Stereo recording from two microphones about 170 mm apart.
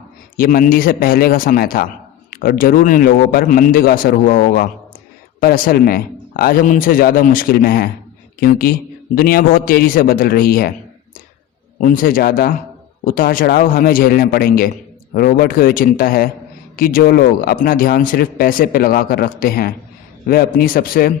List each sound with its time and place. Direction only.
0.3 s speech: 55° left (ahead or behind)
11.8 s speech: 55° left (ahead or behind)